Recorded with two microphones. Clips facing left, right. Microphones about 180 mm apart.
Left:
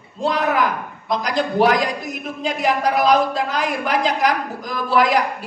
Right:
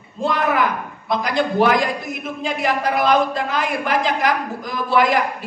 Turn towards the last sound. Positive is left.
turn(degrees=40)  # may be behind; listen again after turning